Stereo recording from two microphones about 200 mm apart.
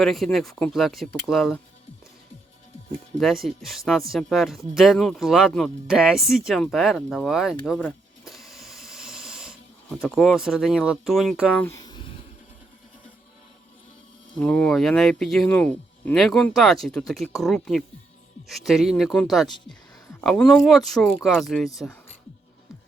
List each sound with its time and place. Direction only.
0.0 s speech: centre (ahead or behind)
3.2 s speech: centre (ahead or behind)
8.2 s snake: centre (ahead or behind)
11.6 s a sound: 20° left (ahead or behind)
14.3 s speech: 5° left (ahead or behind)